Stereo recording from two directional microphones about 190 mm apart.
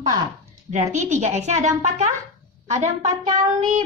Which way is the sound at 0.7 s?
40° right (ahead or behind).